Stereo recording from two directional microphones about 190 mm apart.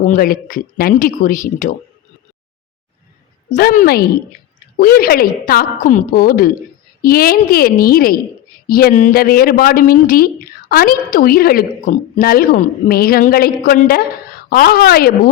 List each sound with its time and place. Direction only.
0.1 s a woman's voice: 50° left (ahead or behind)
3.5 s a woman's voice: 45° left (ahead or behind)